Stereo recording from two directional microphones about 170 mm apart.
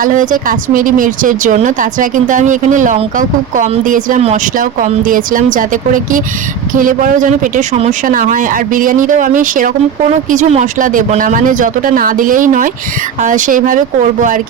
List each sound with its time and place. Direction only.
0.0 s speech: 50° right (ahead or behind)